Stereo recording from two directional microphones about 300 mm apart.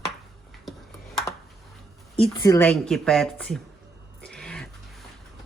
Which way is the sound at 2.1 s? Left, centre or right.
Centre.